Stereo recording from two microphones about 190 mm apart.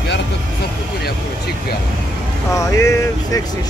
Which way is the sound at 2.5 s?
15° left (ahead or behind).